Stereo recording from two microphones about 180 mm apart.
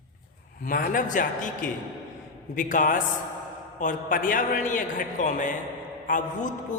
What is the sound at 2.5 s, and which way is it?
Mantra, 50° left (ahead or behind).